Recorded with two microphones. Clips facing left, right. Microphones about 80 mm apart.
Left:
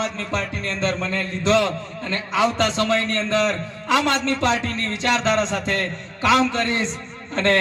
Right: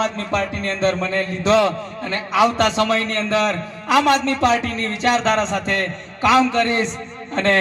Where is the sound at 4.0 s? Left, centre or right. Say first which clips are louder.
Right 5 dB; right.